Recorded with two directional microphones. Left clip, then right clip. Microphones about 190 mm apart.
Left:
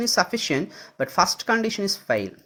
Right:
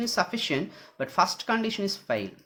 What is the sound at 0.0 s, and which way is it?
Speech, 30° left (ahead or behind).